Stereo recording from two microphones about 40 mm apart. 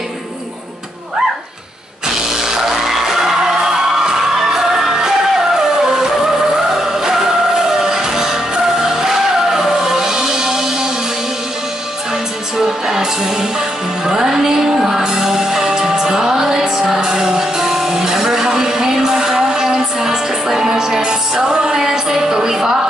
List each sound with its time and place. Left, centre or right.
2.6 s music: centre
7.6 s music: centre
12.8 s music: centre